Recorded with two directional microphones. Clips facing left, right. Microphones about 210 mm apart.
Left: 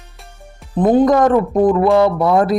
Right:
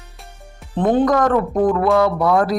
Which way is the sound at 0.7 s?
10° left (ahead or behind).